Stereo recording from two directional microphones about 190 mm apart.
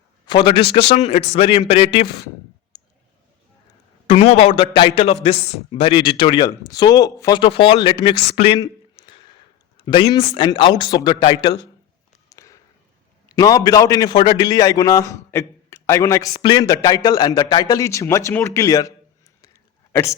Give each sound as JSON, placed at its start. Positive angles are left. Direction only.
{"t": 0.3, "sound": "a man's voice", "side_deg": 25}
{"t": 0.6, "sound": "speech", "side_deg": 60}
{"t": 0.9, "sound": "a man's voice", "side_deg": 35}
{"t": 2.7, "sound": "clicking", "side_deg": 20}
{"t": 4.0, "sound": "a man's voice", "side_deg": 35}
{"t": 9.0, "sound": "a sound", "side_deg": 25}
{"t": 9.7, "sound": "a man's voice", "side_deg": 30}
{"t": 12.3, "sound": "a sound", "side_deg": 15}
{"t": 13.3, "sound": "a man's voice", "side_deg": 20}